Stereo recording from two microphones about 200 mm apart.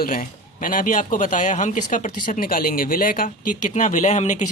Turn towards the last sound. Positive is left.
turn(degrees=35)  # may be behind; listen again after turning